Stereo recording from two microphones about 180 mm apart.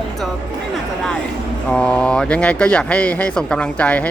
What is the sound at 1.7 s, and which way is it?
Speech, 5° left (ahead or behind).